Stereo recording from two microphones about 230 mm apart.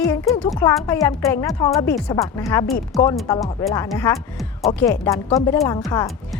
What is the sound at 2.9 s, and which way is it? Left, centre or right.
Speech, centre.